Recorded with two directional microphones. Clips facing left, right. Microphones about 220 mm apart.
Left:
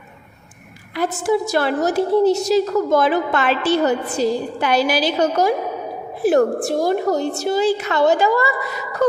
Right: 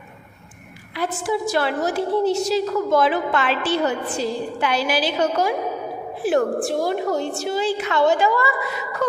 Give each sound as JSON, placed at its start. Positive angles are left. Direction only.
{"t": 0.9, "sound": "a woman's voice", "side_deg": 45}